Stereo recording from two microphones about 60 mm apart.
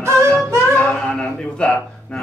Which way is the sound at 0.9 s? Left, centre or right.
Centre.